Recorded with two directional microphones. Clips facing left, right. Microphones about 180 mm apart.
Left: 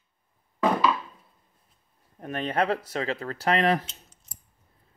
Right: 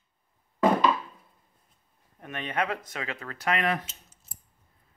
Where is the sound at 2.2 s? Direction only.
35° left (ahead or behind).